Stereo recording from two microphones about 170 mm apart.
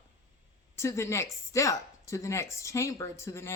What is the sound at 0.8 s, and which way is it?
Speech, 15° left (ahead or behind).